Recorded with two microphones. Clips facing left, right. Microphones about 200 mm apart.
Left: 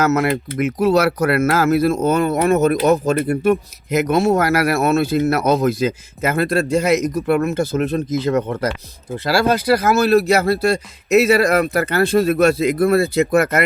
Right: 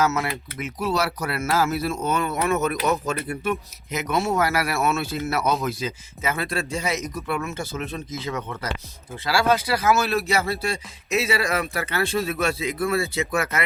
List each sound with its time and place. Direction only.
0.1 s speech: 60° left (ahead or behind)
1.2 s speech: 65° left (ahead or behind)
1.9 s speech: 40° left (ahead or behind)
6.8 s speech: 65° left (ahead or behind)
7.5 s speech: 40° left (ahead or behind)
12.1 s speech: 60° left (ahead or behind)
12.4 s speech: 40° left (ahead or behind)